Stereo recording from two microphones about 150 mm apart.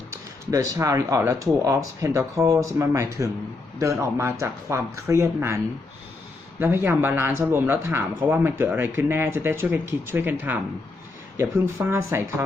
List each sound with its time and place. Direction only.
0.1 s speech: 25° right (ahead or behind)
6.6 s speech: 15° right (ahead or behind)